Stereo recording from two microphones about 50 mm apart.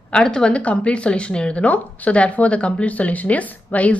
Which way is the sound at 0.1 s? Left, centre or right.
Centre.